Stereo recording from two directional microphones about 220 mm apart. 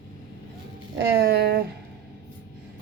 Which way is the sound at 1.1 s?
45° right (ahead or behind).